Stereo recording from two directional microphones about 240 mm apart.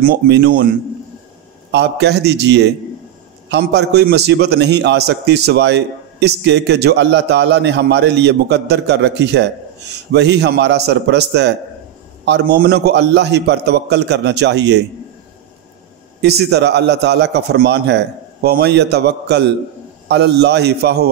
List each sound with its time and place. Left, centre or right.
0.0 s a man's voice: right
1.7 s a man's voice: right
16.2 s a man's voice: right